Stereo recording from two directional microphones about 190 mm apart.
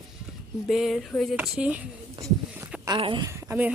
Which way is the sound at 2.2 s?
25° right (ahead or behind).